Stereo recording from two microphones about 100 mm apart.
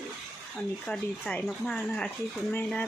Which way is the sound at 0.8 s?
10° left (ahead or behind).